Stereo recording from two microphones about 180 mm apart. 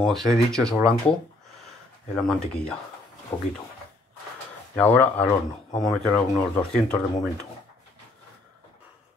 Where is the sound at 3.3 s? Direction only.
25° left (ahead or behind).